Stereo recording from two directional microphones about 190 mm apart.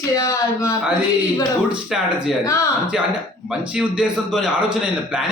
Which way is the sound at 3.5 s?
5° right (ahead or behind).